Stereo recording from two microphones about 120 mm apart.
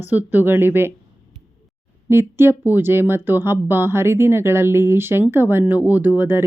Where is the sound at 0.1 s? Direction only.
15° right (ahead or behind).